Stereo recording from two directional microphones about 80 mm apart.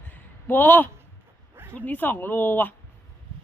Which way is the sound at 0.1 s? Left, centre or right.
Left.